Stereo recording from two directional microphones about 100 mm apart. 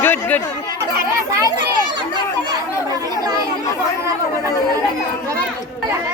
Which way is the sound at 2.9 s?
40° right (ahead or behind).